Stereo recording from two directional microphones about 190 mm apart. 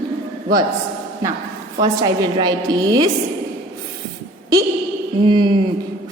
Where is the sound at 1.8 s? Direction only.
20° right (ahead or behind).